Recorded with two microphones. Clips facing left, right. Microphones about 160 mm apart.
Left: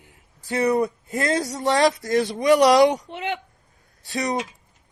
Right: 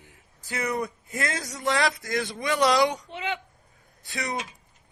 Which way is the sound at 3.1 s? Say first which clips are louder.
Left 3 dB; 55° left (ahead or behind).